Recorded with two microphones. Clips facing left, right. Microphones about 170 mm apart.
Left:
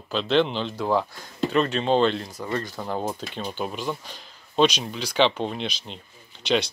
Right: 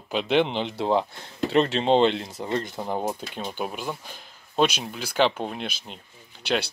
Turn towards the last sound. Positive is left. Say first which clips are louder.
# left 3 dB
turn(degrees=-10)  # may be behind; listen again after turning